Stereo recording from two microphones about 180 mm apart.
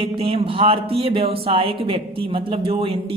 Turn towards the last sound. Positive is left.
turn(degrees=-30)  # may be behind; listen again after turning